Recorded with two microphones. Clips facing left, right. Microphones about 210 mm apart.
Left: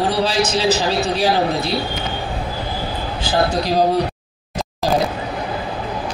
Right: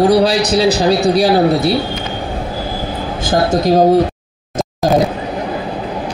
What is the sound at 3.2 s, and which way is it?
Speech, 45° right (ahead or behind).